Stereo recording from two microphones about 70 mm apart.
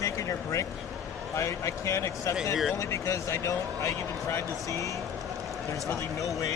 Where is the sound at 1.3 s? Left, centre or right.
Left.